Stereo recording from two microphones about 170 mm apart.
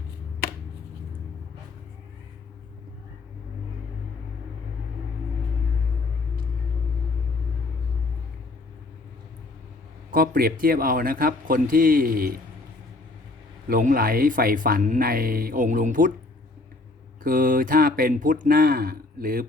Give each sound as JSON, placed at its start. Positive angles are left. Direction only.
{"t": 10.1, "sound": "speech", "side_deg": -60}
{"t": 13.7, "sound": "speech", "side_deg": -55}
{"t": 17.2, "sound": "speech", "side_deg": -55}